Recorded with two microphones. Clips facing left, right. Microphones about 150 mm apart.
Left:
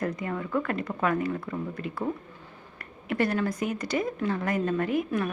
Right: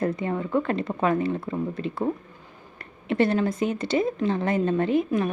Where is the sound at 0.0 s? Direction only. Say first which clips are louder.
Right 5 dB; 30° right (ahead or behind).